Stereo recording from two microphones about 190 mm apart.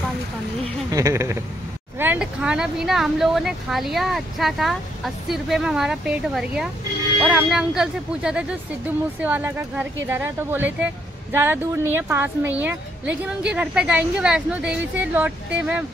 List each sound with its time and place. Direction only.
0.9 s speech: 15° right (ahead or behind)